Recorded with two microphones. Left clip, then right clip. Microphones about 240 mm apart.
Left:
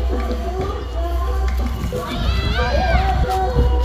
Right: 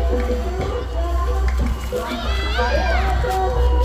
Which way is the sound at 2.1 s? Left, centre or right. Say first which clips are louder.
Even; right.